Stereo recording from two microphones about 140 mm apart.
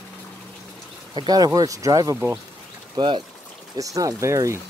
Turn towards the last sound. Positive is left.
turn(degrees=-20)  # may be behind; listen again after turning